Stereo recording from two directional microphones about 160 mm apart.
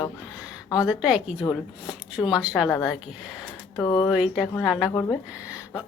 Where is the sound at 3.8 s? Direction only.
25° left (ahead or behind).